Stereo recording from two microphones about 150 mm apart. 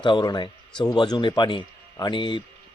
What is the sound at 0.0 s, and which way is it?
A man's voice, 30° left (ahead or behind).